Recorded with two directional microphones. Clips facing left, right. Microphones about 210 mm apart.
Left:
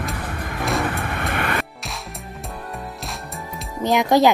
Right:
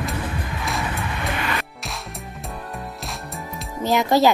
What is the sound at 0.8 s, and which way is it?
Vehicle, 55° left (ahead or behind).